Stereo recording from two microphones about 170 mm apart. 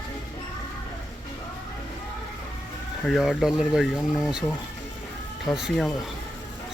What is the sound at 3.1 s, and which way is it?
Speech, centre (ahead or behind).